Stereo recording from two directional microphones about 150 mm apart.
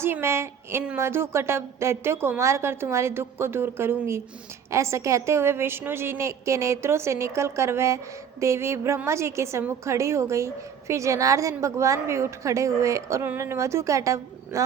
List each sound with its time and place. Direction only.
0.0 s a woman's voice: 15° right (ahead or behind)